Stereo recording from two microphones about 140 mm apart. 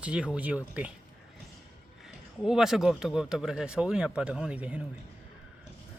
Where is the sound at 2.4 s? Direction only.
5° right (ahead or behind).